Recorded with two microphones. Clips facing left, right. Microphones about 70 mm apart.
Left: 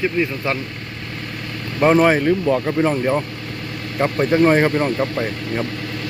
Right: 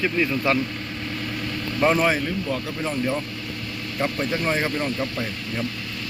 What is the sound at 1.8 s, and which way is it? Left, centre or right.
Speech, left.